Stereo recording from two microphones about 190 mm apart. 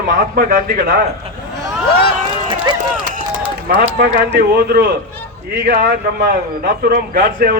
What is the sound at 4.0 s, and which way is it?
A man's voice, 55° right (ahead or behind).